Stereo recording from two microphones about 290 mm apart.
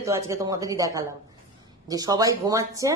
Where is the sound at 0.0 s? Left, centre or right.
Centre.